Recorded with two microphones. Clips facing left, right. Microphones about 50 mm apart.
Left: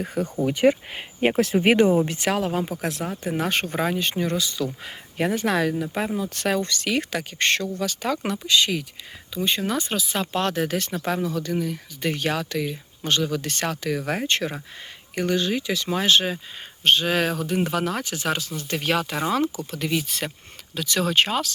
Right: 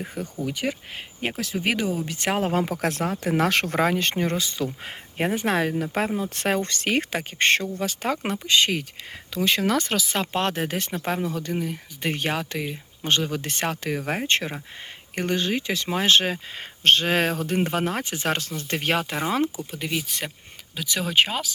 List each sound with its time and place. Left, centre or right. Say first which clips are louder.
0.0 s speech: left 6 dB; centre
0.4 s speech: left 10 dB; left
1.3 s speech: left 7 dB; left
2.5 s speech: right 2 dB; right
5.8 s speech: right 1 dB; right
6.2 s speech: even; right
9.3 s speech: right 2 dB; right
10.3 s speech: left 3 dB; right
13.5 s speech: even; right
14.3 s speech: even; right
19.5 s speech: left 3 dB; centre